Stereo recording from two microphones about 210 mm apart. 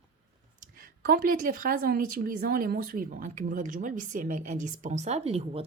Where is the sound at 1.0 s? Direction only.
45° right (ahead or behind).